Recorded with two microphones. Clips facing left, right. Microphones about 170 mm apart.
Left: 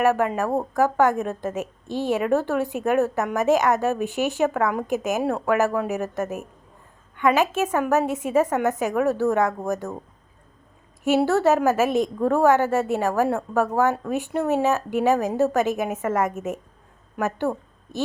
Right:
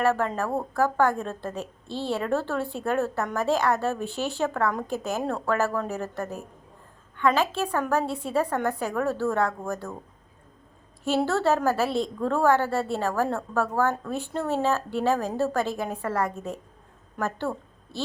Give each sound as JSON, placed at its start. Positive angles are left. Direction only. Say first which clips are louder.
{"t": 0.0, "sound": "a woman's voice", "louder": "left 4 dB", "side_deg": 15}
{"t": 11.2, "sound": "a woman's voice", "louder": "left 4 dB", "side_deg": 15}